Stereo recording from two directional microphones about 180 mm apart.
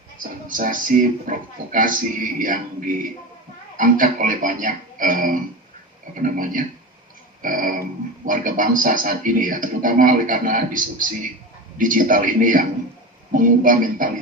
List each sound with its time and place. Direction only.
0.2 s a man's voice: 50° right (ahead or behind)